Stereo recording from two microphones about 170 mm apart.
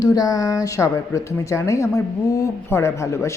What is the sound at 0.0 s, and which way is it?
Speech, 20° left (ahead or behind).